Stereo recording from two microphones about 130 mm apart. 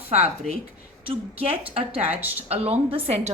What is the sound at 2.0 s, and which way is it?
Speech, 15° right (ahead or behind).